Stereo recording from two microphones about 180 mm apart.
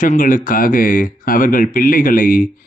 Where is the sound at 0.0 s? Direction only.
50° left (ahead or behind).